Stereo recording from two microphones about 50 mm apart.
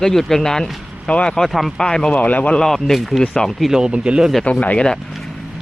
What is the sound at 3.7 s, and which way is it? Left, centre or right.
Speech, centre.